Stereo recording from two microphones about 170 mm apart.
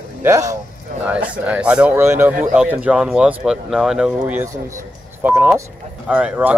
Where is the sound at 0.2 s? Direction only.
20° right (ahead or behind).